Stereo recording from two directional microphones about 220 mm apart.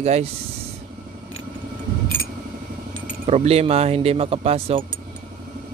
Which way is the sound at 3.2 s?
30° right (ahead or behind).